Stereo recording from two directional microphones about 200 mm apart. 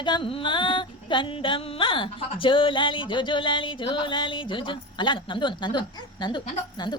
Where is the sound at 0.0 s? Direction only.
25° left (ahead or behind).